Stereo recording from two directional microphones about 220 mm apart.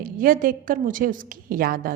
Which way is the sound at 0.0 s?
40° right (ahead or behind).